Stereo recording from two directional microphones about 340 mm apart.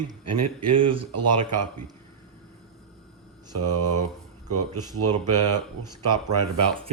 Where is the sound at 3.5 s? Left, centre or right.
Right.